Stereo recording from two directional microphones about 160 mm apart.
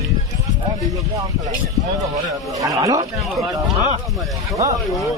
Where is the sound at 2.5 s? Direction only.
20° right (ahead or behind).